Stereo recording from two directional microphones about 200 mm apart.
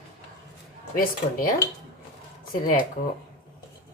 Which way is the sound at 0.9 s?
45° left (ahead or behind).